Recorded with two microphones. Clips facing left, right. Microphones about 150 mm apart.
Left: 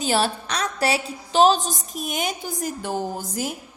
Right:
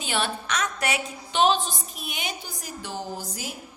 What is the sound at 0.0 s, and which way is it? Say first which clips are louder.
A woman's voice: left 6 dB; 35° left (ahead or behind).